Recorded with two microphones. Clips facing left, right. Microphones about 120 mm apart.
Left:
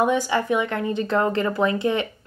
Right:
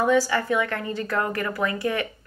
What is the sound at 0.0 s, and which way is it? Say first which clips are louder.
A woman's voice: even; 20° left (ahead or behind).